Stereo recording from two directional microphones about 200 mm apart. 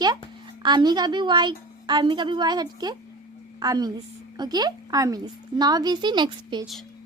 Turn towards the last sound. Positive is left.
turn(degrees=-20)  # may be behind; listen again after turning